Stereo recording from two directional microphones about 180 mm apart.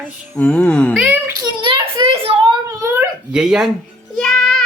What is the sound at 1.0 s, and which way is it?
A child's voice, 10° right (ahead or behind).